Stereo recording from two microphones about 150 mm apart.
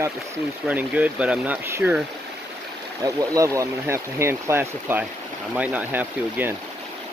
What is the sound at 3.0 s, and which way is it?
Speech, 20° right (ahead or behind).